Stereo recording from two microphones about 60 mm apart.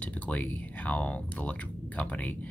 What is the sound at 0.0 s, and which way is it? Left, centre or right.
Speech, left.